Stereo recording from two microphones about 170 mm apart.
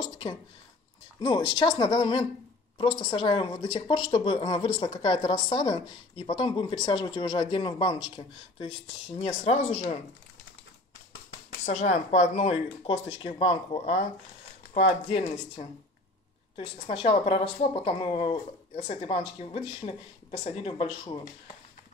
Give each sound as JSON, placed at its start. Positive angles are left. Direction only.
{"t": 0.0, "sound": "a sound", "side_deg": 30}
{"t": 1.2, "sound": "speech", "side_deg": 25}
{"t": 11.6, "sound": "speech", "side_deg": 45}
{"t": 15.0, "sound": "speech", "side_deg": 35}